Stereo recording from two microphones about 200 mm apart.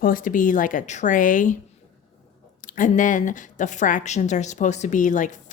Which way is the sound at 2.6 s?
40° left (ahead or behind).